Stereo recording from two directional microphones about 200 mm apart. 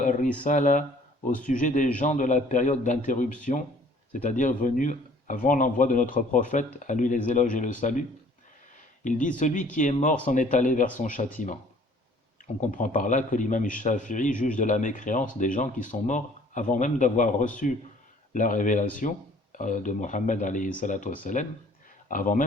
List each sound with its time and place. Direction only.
0.0 s a sound: 40° left (ahead or behind)
0.4 s a man's voice: 40° left (ahead or behind)
9.0 s a man's voice: 40° left (ahead or behind)
12.5 s a man's voice: 40° left (ahead or behind)